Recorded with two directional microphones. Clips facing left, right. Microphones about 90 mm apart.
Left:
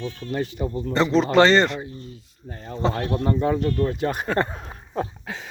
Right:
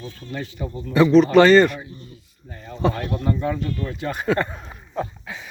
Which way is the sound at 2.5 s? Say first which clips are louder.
Right 2 dB; 35° left (ahead or behind).